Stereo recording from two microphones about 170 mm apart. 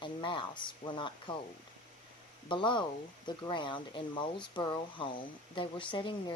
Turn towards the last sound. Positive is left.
turn(degrees=30)  # may be behind; listen again after turning